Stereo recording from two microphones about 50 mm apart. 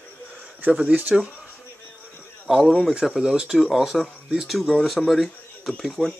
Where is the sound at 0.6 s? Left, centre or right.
Right.